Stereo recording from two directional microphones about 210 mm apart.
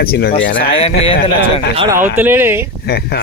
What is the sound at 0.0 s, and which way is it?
Speech, 45° left (ahead or behind).